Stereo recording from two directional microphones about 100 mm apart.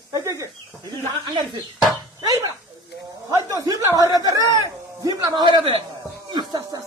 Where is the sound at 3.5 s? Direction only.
35° right (ahead or behind).